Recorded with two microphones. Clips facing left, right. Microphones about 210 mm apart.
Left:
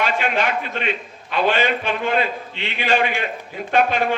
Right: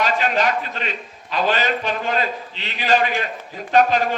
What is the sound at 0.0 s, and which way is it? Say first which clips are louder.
A man's voice: right 1 dB; 40° right (ahead or behind).